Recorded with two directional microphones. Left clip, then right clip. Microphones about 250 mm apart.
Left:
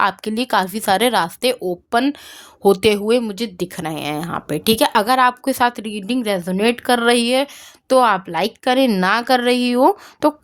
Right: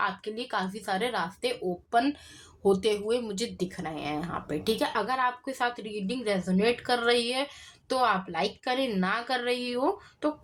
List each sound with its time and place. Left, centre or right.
0.0 s speech: left